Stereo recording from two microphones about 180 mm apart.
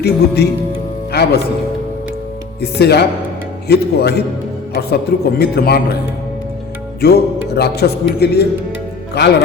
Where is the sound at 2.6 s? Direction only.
65° left (ahead or behind).